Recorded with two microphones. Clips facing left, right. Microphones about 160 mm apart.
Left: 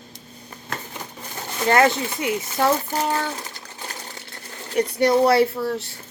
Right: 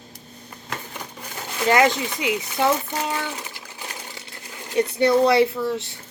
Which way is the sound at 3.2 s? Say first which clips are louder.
Left 2 dB; 10° right (ahead or behind).